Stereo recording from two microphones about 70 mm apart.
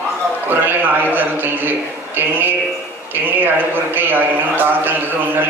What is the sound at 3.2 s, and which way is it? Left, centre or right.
A man's voice, right.